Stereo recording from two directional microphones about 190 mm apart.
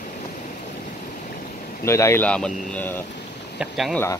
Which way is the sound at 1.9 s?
15° left (ahead or behind).